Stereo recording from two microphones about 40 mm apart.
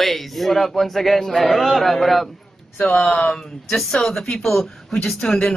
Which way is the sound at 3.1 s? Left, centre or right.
Left.